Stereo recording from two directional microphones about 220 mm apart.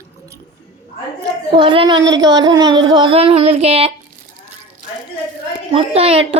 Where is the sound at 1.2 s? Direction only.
20° right (ahead or behind).